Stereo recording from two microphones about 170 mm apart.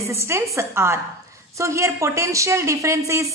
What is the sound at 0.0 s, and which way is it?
A woman's voice, 15° right (ahead or behind).